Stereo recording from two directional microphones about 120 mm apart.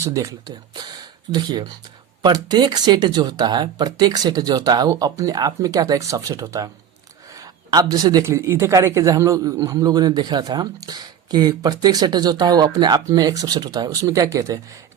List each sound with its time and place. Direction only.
0.0 s a man's voice: 25° right (ahead or behind)
7.3 s a sound: 30° right (ahead or behind)
8.2 s a man's voice: 25° right (ahead or behind)